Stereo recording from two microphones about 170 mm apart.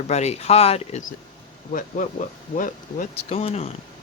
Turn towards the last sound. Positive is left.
turn(degrees=40)  # may be behind; listen again after turning